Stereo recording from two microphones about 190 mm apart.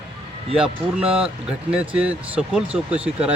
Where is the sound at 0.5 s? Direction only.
5° right (ahead or behind).